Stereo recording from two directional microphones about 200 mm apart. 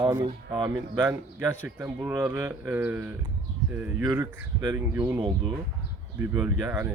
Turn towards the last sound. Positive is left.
turn(degrees=-10)  # may be behind; listen again after turning